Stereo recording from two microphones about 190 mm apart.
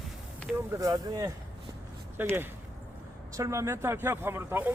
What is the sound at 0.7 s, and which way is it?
Speech, 15° right (ahead or behind).